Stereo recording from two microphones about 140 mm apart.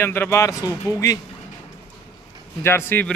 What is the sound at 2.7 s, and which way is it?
Speech, 15° left (ahead or behind).